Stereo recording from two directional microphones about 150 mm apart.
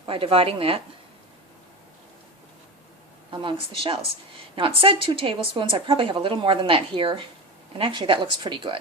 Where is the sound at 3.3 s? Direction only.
35° right (ahead or behind).